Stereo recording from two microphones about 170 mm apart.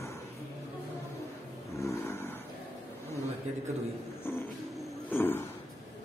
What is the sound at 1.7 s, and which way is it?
Snoring, 15° left (ahead or behind).